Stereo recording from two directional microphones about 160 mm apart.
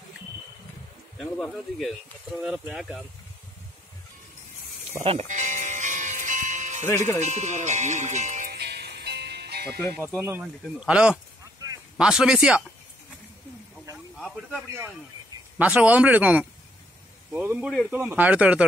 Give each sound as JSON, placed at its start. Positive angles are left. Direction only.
{"t": 1.1, "sound": "speech", "side_deg": 0}
{"t": 5.0, "sound": "music", "side_deg": -45}
{"t": 7.2, "sound": "speech", "side_deg": -45}
{"t": 8.5, "sound": "music", "side_deg": -85}
{"t": 10.2, "sound": "speech", "side_deg": -10}
{"t": 14.2, "sound": "speech", "side_deg": 0}